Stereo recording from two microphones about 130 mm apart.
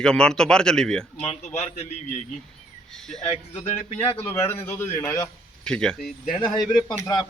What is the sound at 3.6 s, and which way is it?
Speech, 50° left (ahead or behind).